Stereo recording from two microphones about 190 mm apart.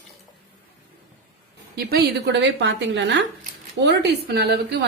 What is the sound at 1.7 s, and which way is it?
A woman's voice, 60° right (ahead or behind).